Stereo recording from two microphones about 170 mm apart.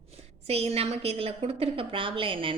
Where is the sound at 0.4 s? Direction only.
35° right (ahead or behind).